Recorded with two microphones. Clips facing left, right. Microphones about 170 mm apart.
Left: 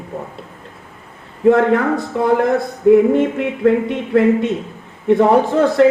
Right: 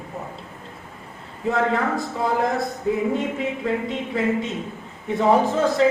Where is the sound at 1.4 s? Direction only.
60° left (ahead or behind).